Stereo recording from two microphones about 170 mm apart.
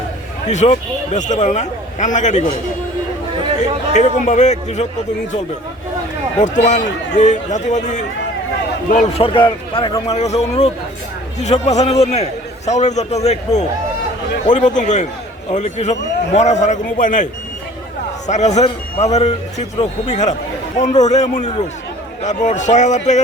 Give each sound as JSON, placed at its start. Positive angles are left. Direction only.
{"t": 0.4, "sound": "speech", "side_deg": 45}
{"t": 3.9, "sound": "speech", "side_deg": 45}
{"t": 6.4, "sound": "speech", "side_deg": 45}
{"t": 9.2, "sound": "a man's voice", "side_deg": 30}
{"t": 18.3, "sound": "a man's voice", "side_deg": 40}